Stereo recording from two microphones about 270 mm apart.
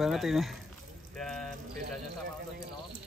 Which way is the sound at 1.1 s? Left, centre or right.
Centre.